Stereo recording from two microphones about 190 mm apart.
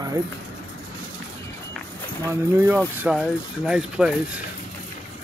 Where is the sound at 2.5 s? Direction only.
10° right (ahead or behind).